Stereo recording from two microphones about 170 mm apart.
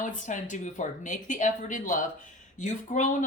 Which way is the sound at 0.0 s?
50° left (ahead or behind).